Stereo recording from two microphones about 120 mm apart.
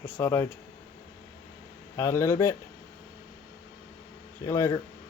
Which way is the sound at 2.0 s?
25° left (ahead or behind).